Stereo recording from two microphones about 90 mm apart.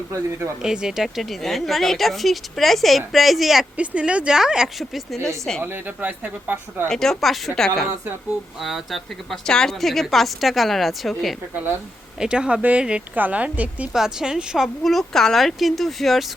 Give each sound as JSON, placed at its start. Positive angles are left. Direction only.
{"t": 0.1, "sound": "speech", "side_deg": -30}
{"t": 0.6, "sound": "a woman's voice", "side_deg": -5}
{"t": 3.8, "sound": "a woman's voice", "side_deg": -15}
{"t": 5.6, "sound": "speech", "side_deg": -20}
{"t": 6.8, "sound": "a woman's voice", "side_deg": 5}
{"t": 11.5, "sound": "speech", "side_deg": -20}
{"t": 12.2, "sound": "a woman's voice", "side_deg": -10}